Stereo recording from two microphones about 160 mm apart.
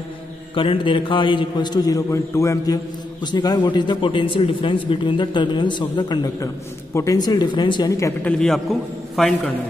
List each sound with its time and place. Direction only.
0.6 s a man's voice: 30° left (ahead or behind)
8.2 s a man's voice: 5° left (ahead or behind)